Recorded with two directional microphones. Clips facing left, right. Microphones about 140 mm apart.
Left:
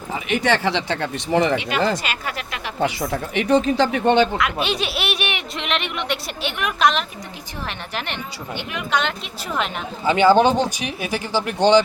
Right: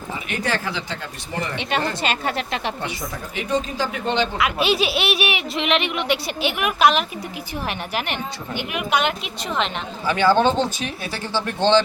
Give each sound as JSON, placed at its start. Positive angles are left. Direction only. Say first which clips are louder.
{"t": 0.3, "sound": "speech", "louder": "left 6 dB", "side_deg": 85}
{"t": 1.5, "sound": "speech", "louder": "left 3 dB", "side_deg": -30}
{"t": 2.8, "sound": "speech", "louder": "left 7 dB", "side_deg": 80}
{"t": 4.4, "sound": "a woman's voice", "louder": "right 2 dB", "side_deg": -5}
{"t": 10.1, "sound": "speech", "louder": "left 3 dB", "side_deg": 15}